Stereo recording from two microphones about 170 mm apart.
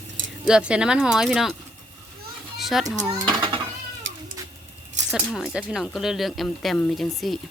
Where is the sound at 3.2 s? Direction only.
25° right (ahead or behind).